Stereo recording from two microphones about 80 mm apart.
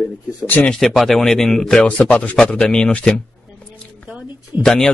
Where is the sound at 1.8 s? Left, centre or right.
Centre.